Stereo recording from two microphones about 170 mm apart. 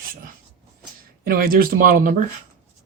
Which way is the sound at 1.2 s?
60° right (ahead or behind).